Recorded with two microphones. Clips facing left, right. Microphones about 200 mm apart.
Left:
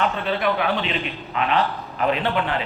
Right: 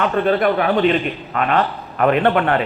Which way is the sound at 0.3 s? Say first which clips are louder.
Right 8 dB; 50° right (ahead or behind).